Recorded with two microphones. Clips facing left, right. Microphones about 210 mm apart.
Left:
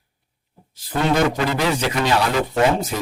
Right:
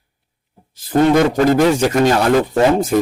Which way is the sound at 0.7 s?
45° right (ahead or behind).